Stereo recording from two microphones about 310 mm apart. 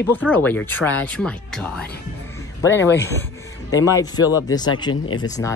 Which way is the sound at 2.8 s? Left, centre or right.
Left.